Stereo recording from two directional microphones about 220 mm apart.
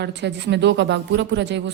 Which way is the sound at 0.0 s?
50° right (ahead or behind).